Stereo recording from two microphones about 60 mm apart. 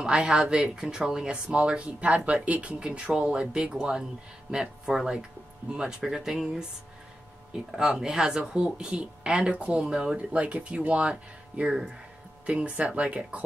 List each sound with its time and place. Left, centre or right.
0.0 s speech: centre